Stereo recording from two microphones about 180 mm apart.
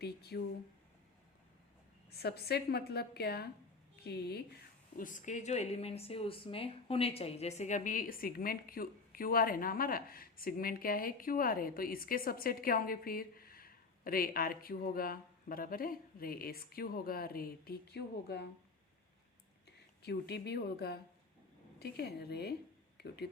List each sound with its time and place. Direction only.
0.0 s a woman's voice: 65° left (ahead or behind)
2.0 s a woman's voice: 60° left (ahead or behind)
19.6 s a woman's voice: 65° left (ahead or behind)